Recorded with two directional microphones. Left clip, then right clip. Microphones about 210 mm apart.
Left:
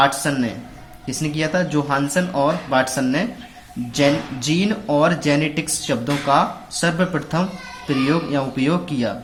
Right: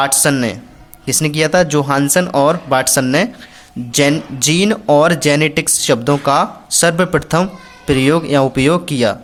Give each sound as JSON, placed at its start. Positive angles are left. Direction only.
{"t": 0.0, "sound": "speech", "side_deg": -45}